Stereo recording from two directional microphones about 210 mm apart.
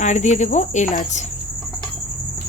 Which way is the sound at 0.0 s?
35° left (ahead or behind).